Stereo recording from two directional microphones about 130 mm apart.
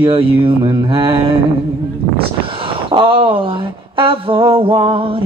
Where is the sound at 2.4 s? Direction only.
45° right (ahead or behind).